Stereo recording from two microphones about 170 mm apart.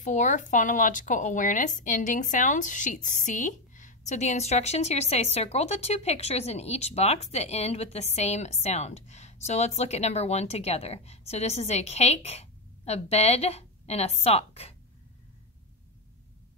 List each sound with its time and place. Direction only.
0.0 s speech: 45° left (ahead or behind)